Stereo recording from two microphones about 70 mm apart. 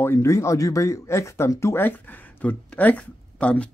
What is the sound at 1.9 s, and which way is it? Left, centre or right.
Speech, left.